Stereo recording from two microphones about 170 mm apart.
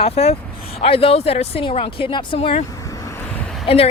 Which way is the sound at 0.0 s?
35° left (ahead or behind).